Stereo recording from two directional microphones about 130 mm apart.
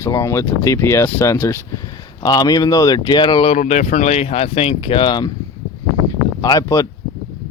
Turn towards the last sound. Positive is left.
turn(degrees=30)  # may be behind; listen again after turning